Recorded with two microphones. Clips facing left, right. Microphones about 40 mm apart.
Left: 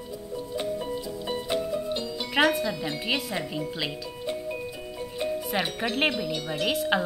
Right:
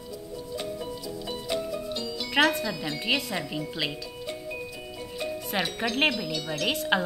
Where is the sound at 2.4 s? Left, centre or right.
Centre.